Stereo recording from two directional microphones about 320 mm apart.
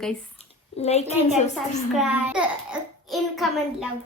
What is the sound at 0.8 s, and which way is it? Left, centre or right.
Speech, left.